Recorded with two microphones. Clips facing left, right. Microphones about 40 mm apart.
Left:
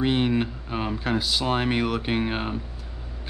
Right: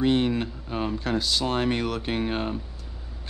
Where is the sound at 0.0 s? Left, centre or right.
Centre.